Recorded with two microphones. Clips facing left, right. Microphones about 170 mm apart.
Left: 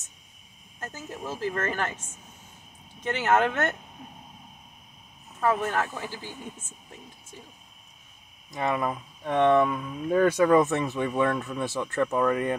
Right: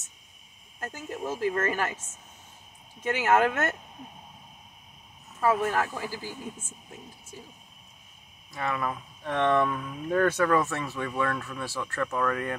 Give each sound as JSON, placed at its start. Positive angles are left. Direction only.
{"t": 0.7, "sound": "speech", "side_deg": -15}
{"t": 3.0, "sound": "speech", "side_deg": -10}
{"t": 5.4, "sound": "speech", "side_deg": -10}
{"t": 8.5, "sound": "speech", "side_deg": 20}